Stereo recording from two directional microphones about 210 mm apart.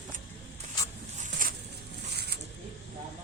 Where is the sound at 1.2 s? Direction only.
40° right (ahead or behind).